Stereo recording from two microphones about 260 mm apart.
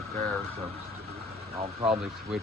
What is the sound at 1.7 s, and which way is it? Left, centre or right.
Speech, right.